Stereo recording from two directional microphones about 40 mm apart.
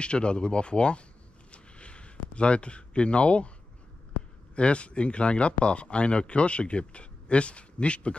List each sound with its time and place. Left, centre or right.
0.0 s speech: left
1.5 s a sound: left
4.6 s speech: left